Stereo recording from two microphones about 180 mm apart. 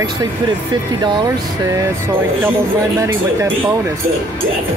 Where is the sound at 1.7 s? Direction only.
15° right (ahead or behind).